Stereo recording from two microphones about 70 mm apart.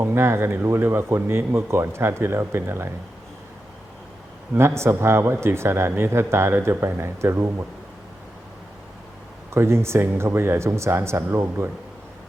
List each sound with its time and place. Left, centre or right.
0.0 s a man's voice: right
4.5 s a man's voice: right
9.5 s a man's voice: right